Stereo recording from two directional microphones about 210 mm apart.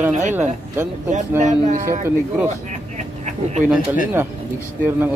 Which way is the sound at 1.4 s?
35° right (ahead or behind).